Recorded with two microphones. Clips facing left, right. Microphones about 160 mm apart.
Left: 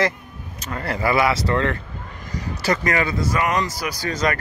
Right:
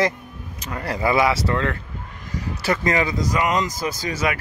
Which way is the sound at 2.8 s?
20° right (ahead or behind).